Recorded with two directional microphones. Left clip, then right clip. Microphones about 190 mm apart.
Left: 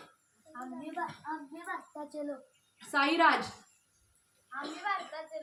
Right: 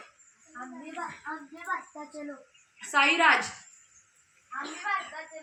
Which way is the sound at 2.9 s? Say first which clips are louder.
Right 4 dB; 45° left (ahead or behind).